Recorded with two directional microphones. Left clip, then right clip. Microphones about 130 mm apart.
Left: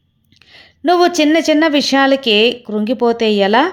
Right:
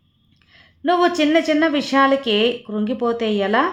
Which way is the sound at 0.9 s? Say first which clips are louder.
Left 5 dB; 40° left (ahead or behind).